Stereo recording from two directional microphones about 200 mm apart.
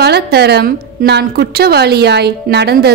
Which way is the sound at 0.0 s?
55° right (ahead or behind).